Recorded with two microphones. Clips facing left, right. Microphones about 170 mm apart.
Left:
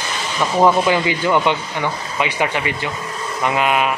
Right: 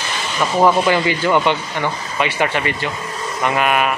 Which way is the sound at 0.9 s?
15° left (ahead or behind).